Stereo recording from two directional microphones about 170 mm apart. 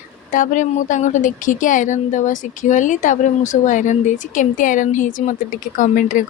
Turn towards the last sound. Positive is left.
turn(degrees=50)  # may be behind; listen again after turning